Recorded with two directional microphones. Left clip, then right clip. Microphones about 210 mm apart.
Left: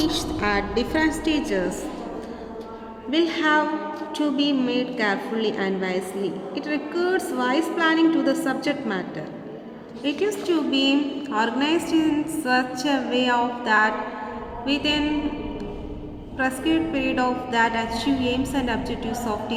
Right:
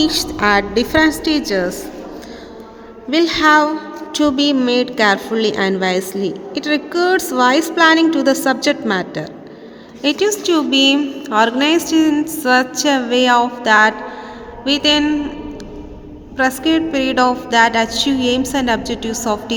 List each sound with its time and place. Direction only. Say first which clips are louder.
0.0 s a woman's voice: right 8 dB; 35° right (ahead or behind)
3.1 s a woman's voice: right 9 dB; 35° right (ahead or behind)
16.4 s a woman's voice: right 7 dB; 40° right (ahead or behind)